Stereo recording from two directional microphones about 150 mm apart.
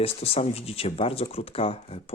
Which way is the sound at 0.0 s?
40° left (ahead or behind).